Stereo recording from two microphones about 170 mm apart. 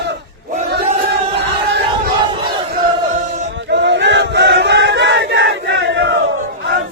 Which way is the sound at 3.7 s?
90° right.